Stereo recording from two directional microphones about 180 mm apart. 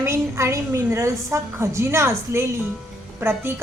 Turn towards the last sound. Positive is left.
turn(degrees=-10)  # may be behind; listen again after turning